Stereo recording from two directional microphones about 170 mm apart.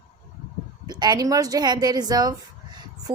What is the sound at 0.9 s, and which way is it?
Speech, 25° right (ahead or behind).